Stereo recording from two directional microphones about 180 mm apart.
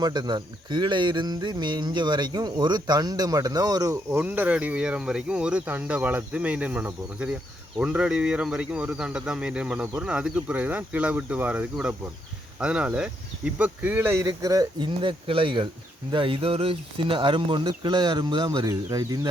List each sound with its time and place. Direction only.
0.0 s speech: 25° right (ahead or behind)
4.2 s speech: 10° right (ahead or behind)